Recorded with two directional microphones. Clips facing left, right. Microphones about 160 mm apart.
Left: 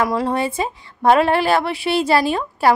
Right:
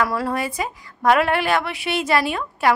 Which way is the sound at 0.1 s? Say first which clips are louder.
Left 4 dB; 20° left (ahead or behind).